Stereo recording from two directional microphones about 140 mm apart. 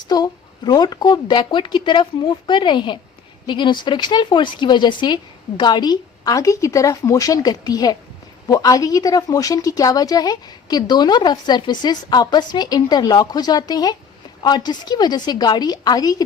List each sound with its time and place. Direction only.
0.1 s speech: 30° left (ahead or behind)